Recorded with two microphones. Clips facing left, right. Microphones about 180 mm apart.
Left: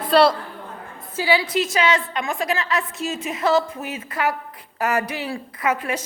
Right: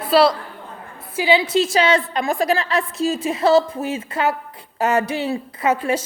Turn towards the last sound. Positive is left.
turn(degrees=-30)  # may be behind; listen again after turning